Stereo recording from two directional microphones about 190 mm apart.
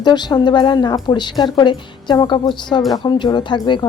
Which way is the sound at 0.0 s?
25° left (ahead or behind).